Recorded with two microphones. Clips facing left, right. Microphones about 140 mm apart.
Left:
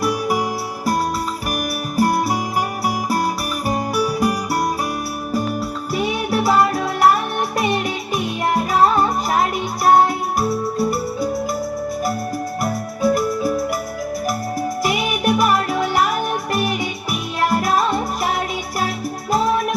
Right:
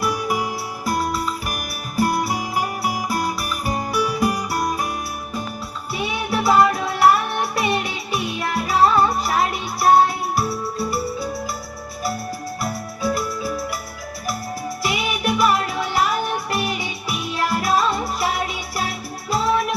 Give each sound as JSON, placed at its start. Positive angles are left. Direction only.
{"t": 0.0, "sound": "music", "side_deg": 40}
{"t": 2.0, "sound": "music", "side_deg": 40}
{"t": 5.9, "sound": "music", "side_deg": 40}
{"t": 13.0, "sound": "music", "side_deg": 45}
{"t": 14.8, "sound": "music", "side_deg": 45}